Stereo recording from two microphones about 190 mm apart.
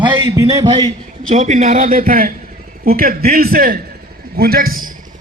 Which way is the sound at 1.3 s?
40° right (ahead or behind).